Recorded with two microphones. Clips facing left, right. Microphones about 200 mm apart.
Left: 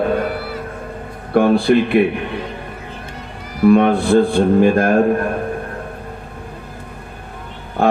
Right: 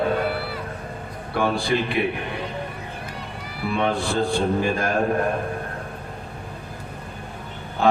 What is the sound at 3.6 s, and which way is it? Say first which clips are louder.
Speech: left 12 dB; 50° left (ahead or behind).